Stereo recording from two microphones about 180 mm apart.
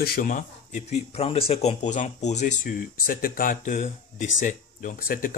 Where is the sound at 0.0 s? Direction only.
55° left (ahead or behind).